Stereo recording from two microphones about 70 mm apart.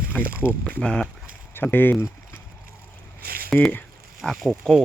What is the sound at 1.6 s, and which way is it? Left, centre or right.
Speech, left.